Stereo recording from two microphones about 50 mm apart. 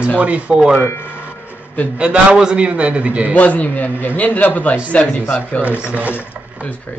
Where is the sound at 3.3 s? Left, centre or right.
Left.